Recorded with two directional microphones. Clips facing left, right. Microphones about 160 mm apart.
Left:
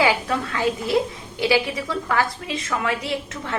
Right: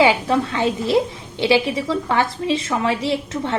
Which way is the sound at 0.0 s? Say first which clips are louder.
Right 5 dB; 25° right (ahead or behind).